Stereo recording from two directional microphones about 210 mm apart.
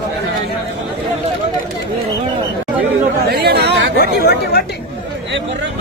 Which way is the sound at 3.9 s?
45° left (ahead or behind).